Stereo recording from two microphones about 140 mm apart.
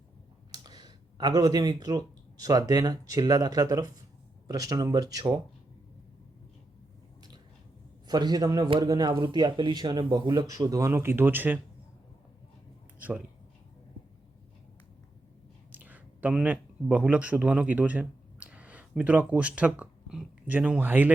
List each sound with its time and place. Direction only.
0.5 s speech: 30° right (ahead or behind)
8.0 s speech: 30° right (ahead or behind); by 11.6 s 15° right (ahead or behind)
13.0 s speech: 10° right (ahead or behind)
15.7 s a man's voice: 10° right (ahead or behind)